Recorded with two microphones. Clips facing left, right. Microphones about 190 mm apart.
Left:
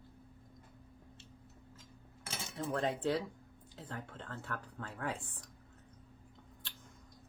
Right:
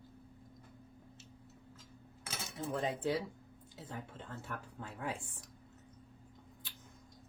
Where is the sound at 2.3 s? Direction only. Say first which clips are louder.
Left 1 dB; centre (ahead or behind).